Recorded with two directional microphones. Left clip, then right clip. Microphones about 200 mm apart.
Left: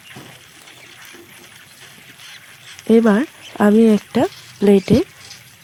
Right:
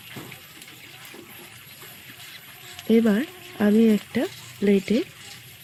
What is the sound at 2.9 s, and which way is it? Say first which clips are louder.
Speech: left 7 dB; 20° left (ahead or behind).